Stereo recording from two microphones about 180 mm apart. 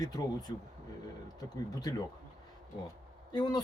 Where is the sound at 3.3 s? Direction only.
20° left (ahead or behind).